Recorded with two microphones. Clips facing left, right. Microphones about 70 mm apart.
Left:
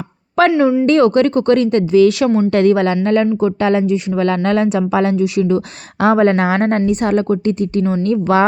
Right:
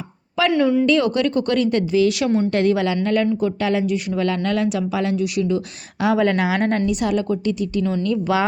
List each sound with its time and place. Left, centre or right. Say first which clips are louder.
0.5 s speech: left 4 dB; centre
0.9 s speech: left 6 dB; left